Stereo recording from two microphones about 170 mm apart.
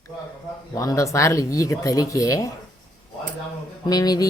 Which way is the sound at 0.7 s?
20° left (ahead or behind).